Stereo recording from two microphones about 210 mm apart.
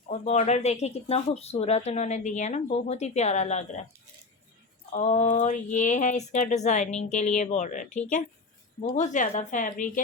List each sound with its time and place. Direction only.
0.1 s speech: 30° left (ahead or behind)
4.9 s speech: 30° left (ahead or behind)